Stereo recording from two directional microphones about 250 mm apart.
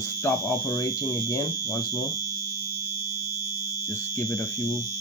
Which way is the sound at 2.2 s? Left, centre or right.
Centre.